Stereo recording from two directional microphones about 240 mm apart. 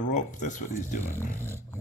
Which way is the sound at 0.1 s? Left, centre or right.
Left.